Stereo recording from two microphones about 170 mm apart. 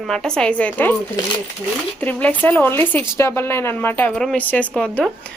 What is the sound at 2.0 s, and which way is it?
A woman's voice, 10° left (ahead or behind).